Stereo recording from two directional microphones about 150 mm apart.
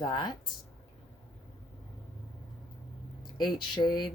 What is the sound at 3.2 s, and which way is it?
Speech, 30° left (ahead or behind).